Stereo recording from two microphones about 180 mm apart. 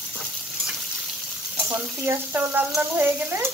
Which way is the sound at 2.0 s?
15° right (ahead or behind).